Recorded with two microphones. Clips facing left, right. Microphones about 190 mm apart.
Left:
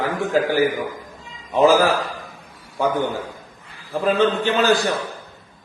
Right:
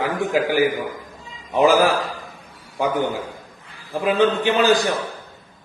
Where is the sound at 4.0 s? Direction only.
15° right (ahead or behind).